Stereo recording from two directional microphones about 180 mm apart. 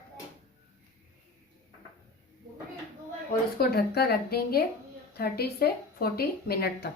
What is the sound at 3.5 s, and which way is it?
Speech, 60° left (ahead or behind).